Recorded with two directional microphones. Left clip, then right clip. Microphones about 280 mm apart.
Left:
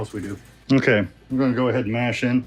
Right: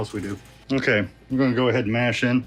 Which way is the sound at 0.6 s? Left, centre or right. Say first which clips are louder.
Left 3 dB; left.